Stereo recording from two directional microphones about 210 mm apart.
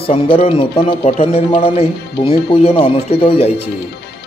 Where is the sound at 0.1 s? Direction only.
25° left (ahead or behind).